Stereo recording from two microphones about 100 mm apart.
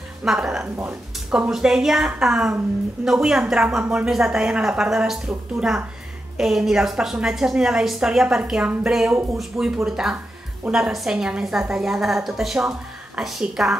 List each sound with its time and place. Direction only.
0.2 s a woman's voice: 5° right (ahead or behind)
9.5 s speech: 25° right (ahead or behind)
9.8 s a woman's voice: 5° right (ahead or behind)